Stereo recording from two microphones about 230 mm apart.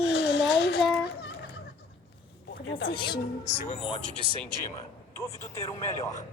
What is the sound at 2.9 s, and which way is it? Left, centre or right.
A woman's voice, centre.